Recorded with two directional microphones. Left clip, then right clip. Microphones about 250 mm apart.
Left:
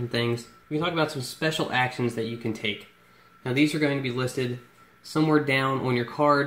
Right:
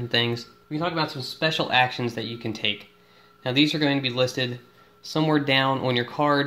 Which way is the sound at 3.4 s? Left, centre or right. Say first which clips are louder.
Right 2 dB; right.